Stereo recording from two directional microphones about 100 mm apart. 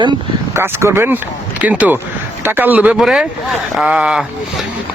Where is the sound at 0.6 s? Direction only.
25° right (ahead or behind).